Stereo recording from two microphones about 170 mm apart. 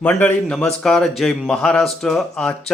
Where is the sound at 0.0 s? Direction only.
10° left (ahead or behind).